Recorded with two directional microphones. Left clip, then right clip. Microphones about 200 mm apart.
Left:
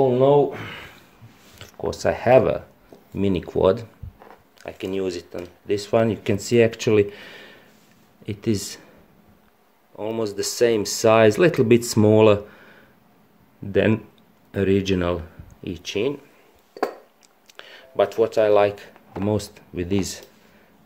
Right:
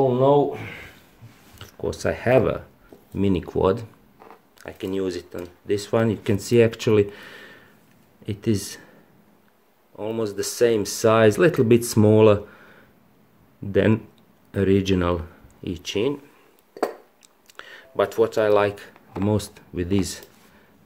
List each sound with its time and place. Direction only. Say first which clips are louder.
0.1 s speech: left 1 dB; 15° left (ahead or behind)
1.6 s speech: left 2 dB; centre (ahead or behind)
9.9 s speech: left 1 dB; 5° left (ahead or behind)
17.6 s speech: left 2 dB; centre (ahead or behind)